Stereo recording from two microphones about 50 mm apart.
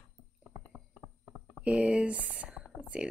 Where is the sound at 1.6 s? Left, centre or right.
Right.